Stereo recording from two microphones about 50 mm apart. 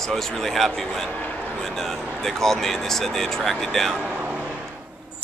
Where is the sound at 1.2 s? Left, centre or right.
Left.